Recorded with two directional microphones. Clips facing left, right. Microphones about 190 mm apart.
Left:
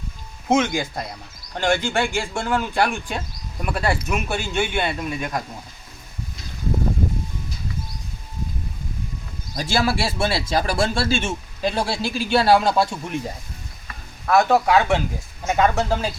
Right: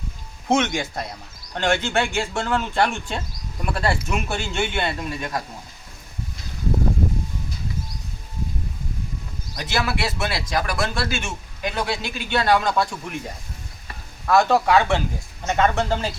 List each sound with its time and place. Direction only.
0.4 s speech: 5° left (ahead or behind)
9.6 s speech: 30° left (ahead or behind)
14.3 s speech: 10° left (ahead or behind)